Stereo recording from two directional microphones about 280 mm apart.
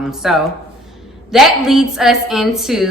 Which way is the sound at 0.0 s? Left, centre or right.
Centre.